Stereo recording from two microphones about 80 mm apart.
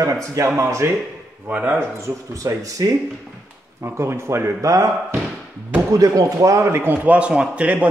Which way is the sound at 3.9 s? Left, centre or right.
Right.